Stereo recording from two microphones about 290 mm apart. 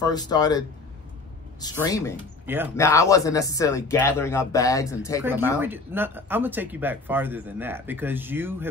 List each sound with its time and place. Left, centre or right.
0.0 s speech: centre
2.4 s speech: centre
2.7 s speech: centre
5.2 s speech: centre